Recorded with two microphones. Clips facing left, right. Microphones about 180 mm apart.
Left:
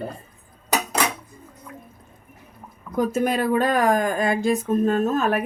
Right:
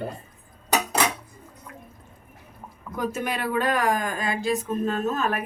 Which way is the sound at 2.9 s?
40° left (ahead or behind).